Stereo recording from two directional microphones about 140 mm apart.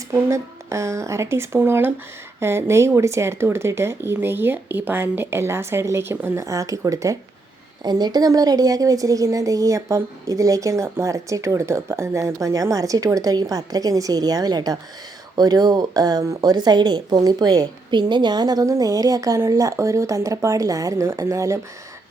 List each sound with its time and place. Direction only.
0.1 s speech: 20° right (ahead or behind)